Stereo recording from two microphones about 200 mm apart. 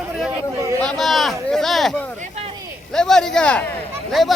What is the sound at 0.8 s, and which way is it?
Speech, 5° left (ahead or behind).